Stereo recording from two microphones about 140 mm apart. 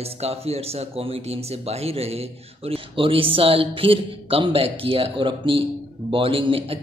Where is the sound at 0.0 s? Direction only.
45° right (ahead or behind).